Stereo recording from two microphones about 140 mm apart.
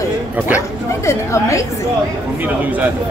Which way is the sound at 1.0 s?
20° left (ahead or behind).